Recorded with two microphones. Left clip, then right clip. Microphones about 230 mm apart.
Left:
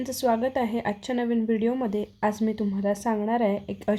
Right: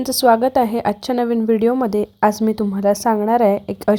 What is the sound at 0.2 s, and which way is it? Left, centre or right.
A woman's voice, right.